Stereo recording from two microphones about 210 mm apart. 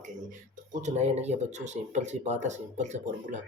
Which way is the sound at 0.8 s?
30° right (ahead or behind).